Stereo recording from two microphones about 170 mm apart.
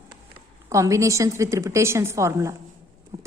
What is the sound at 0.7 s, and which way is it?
A woman's voice, 20° right (ahead or behind).